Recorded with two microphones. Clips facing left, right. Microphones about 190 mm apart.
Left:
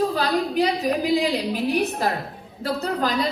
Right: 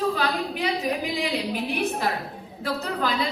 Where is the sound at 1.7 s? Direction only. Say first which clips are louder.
Left 2 dB; 40° left (ahead or behind).